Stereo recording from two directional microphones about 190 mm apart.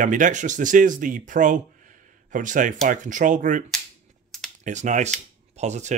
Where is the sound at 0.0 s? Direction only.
40° right (ahead or behind).